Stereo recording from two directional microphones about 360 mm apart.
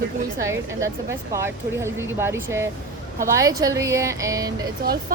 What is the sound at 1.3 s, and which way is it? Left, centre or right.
Speech, centre.